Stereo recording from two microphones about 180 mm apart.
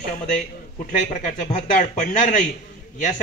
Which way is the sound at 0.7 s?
45° left (ahead or behind).